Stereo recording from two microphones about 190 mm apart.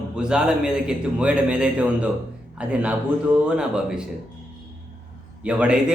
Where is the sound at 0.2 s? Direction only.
5° right (ahead or behind).